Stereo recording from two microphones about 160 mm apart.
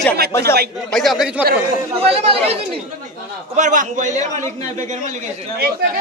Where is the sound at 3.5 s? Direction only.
55° right (ahead or behind).